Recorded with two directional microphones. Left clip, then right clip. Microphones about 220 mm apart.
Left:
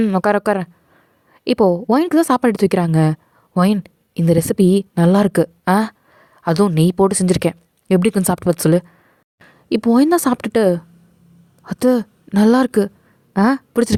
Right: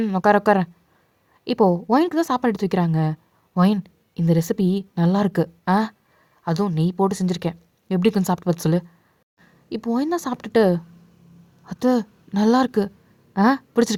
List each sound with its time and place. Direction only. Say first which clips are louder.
0.0 s a woman's voice: left 1 dB; 30° left (ahead or behind)